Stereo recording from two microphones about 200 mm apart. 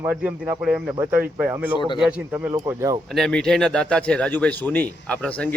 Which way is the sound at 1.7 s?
25° left (ahead or behind).